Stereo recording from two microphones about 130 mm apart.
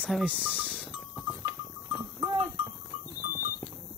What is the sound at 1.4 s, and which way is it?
Goat, 20° right (ahead or behind).